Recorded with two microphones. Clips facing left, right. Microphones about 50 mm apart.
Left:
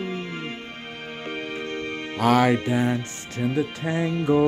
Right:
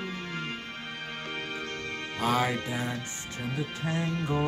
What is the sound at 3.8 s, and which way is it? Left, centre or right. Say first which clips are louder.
Music: left 6 dB; left.